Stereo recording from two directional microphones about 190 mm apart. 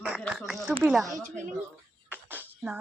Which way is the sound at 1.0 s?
40° right (ahead or behind).